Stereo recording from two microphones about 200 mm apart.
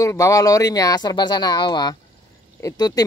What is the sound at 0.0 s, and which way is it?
Speech, 15° left (ahead or behind).